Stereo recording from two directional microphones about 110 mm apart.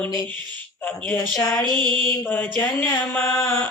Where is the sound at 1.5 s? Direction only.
5° left (ahead or behind).